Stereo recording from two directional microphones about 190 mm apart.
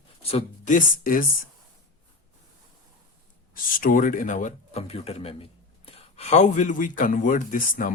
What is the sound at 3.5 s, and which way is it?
Speech, 45° left (ahead or behind).